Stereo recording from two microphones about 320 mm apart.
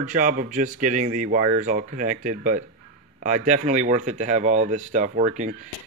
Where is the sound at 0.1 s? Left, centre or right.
Right.